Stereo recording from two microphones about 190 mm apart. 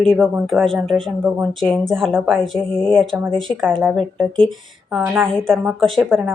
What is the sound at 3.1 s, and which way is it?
Speech, 10° right (ahead or behind).